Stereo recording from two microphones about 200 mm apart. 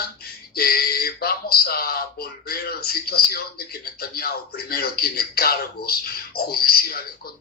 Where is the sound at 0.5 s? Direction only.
50° left (ahead or behind).